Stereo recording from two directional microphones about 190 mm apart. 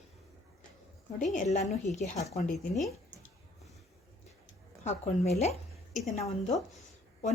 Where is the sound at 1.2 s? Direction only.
40° left (ahead or behind).